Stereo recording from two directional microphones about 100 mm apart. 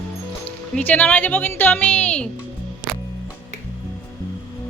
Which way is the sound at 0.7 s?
15° left (ahead or behind).